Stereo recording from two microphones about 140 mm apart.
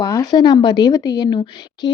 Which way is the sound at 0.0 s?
25° left (ahead or behind).